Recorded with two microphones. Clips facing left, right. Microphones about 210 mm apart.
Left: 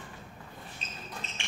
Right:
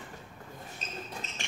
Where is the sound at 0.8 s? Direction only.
40° right (ahead or behind).